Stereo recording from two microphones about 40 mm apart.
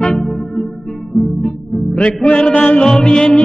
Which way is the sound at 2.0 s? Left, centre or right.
Left.